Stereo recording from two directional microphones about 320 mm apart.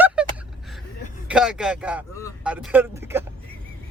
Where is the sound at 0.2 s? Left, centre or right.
Centre.